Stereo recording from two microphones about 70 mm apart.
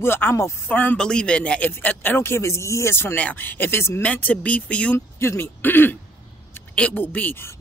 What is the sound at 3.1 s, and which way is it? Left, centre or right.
Speech, left.